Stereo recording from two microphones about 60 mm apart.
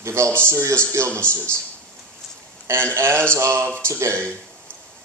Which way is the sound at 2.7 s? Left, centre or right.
Right.